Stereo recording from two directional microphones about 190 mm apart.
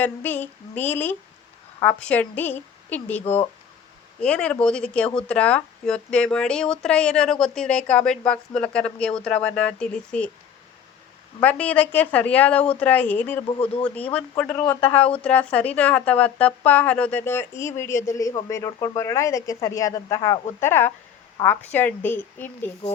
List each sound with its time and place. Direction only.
0.0 s a woman's voice: 10° left (ahead or behind)
3.2 s speech: 35° left (ahead or behind)
4.2 s speech: 5° left (ahead or behind)
11.3 s a woman's voice: 10° left (ahead or behind)
14.8 s speech: 25° left (ahead or behind)
15.0 s a woman's voice: 5° left (ahead or behind)